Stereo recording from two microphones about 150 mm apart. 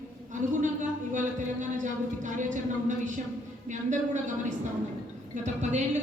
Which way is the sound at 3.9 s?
55° right (ahead or behind).